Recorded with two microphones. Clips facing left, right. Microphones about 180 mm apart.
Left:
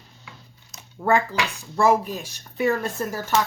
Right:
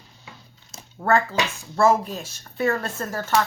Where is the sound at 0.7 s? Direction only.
30° right (ahead or behind).